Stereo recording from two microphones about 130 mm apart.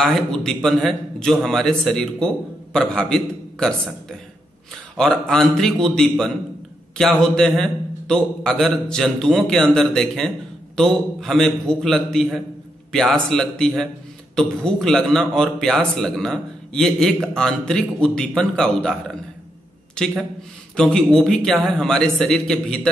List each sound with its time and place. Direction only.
0.0 s a man's voice: 5° left (ahead or behind)
4.9 s a man's voice: 5° left (ahead or behind)